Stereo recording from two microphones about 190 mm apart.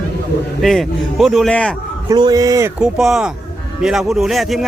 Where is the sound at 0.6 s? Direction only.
Centre (ahead or behind).